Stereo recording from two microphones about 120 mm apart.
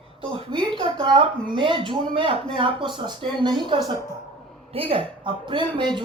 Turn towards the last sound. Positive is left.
turn(degrees=-40)  # may be behind; listen again after turning